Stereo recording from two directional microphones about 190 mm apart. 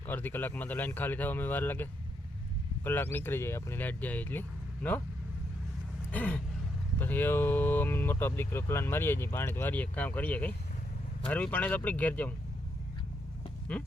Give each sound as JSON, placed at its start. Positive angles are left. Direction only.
{"t": 0.1, "sound": "speech", "side_deg": 10}
{"t": 6.1, "sound": "a sound", "side_deg": 5}
{"t": 7.0, "sound": "speech", "side_deg": 10}
{"t": 13.7, "sound": "speech", "side_deg": 5}